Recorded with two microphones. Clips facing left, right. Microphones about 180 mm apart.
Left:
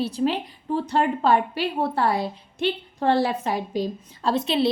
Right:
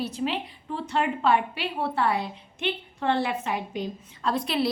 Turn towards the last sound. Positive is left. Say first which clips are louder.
# left 4 dB
turn(degrees=25)  # may be behind; listen again after turning